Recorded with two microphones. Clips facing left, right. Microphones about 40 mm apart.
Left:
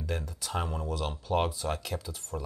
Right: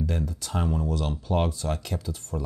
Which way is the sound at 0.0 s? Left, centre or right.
Centre.